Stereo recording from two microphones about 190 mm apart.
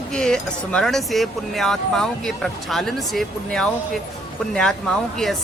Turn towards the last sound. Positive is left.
turn(degrees=0)  # may be behind; listen again after turning